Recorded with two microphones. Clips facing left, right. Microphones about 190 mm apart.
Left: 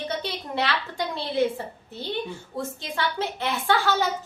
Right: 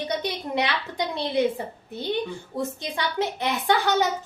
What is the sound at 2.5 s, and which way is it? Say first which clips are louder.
A woman's voice: right 2 dB; 20° right (ahead or behind).